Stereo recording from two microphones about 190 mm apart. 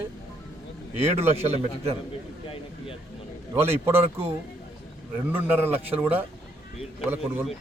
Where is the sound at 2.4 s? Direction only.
30° left (ahead or behind).